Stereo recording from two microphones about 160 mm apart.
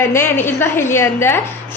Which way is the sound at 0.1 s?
15° left (ahead or behind).